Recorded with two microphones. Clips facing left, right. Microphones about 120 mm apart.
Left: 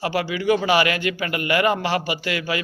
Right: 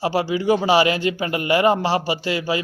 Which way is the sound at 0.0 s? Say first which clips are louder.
Right 2 dB; 35° right (ahead or behind).